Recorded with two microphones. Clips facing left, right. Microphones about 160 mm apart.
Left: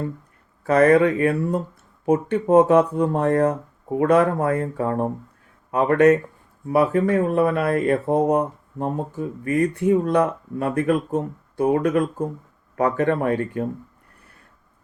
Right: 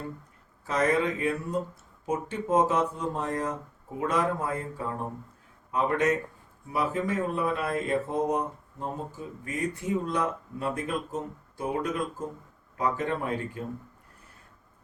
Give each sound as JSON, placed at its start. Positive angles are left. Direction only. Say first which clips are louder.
{"t": 0.6, "sound": "speech", "louder": "left 10 dB", "side_deg": 65}